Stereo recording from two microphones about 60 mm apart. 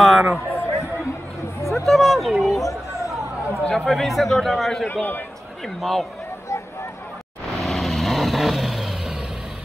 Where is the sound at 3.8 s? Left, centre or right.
Centre.